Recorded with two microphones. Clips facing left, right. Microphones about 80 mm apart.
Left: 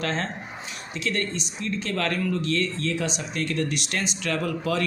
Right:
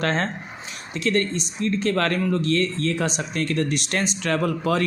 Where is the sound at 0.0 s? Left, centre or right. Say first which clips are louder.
Right 4 dB; right.